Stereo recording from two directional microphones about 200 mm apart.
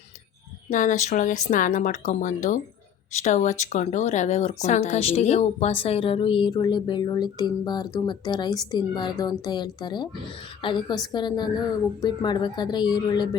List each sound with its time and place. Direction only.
0.7 s speech: 40° left (ahead or behind); by 13.3 s 20° left (ahead or behind)